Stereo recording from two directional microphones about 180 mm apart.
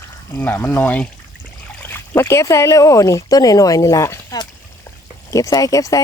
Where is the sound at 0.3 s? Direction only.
10° left (ahead or behind).